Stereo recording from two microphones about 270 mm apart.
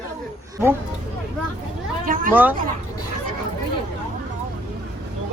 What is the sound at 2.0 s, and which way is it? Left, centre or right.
Speech, right.